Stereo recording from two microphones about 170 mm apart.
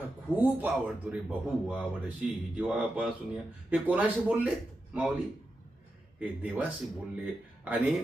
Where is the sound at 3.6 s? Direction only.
10° right (ahead or behind).